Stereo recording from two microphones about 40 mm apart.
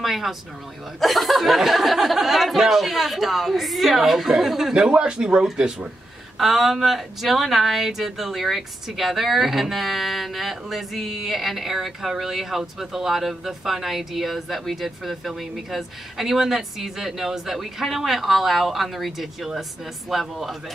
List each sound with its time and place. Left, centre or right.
0.0 s speech: centre
6.3 s speech: centre